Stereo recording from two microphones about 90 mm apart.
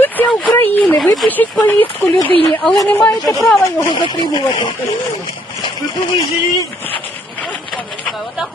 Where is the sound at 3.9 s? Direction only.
60° left (ahead or behind).